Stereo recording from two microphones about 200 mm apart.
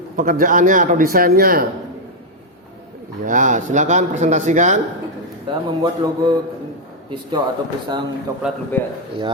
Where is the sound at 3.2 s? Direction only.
40° right (ahead or behind).